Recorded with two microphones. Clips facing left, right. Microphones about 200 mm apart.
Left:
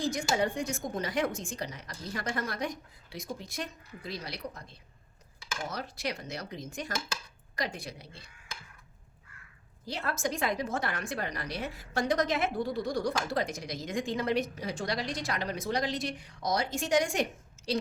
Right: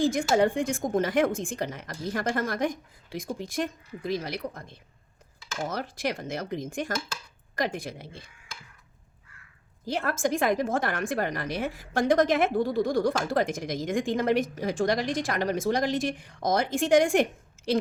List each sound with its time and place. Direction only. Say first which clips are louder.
0.0 s a woman's voice: right 7 dB; 50° right (ahead or behind)
5.6 s a woman's voice: right 6 dB; 50° right (ahead or behind)
9.9 s a woman's voice: right 6 dB; 50° right (ahead or behind)